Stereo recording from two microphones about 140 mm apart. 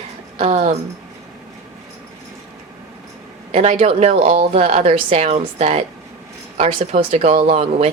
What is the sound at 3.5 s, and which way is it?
Speech, 45° right (ahead or behind).